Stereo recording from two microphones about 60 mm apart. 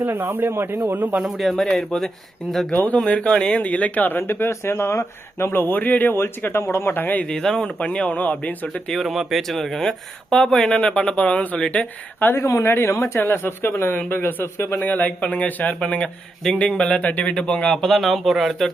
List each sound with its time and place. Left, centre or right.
0.0 s speech: right
1.4 s speech: centre
2.7 s a man's voice: left
3.6 s a man's voice: left
4.2 s speech: left
6.9 s speech: left
7.3 s a man's voice: centre; by 8.5 s left
8.6 s speech: centre
12.2 s speech: left
14.8 s a man's voice: left
17.8 s speech: centre